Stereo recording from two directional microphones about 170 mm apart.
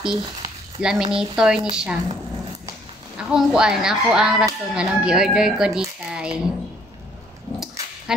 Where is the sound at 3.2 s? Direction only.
5° right (ahead or behind).